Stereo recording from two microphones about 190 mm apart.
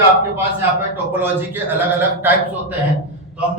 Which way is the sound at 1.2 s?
10° right (ahead or behind).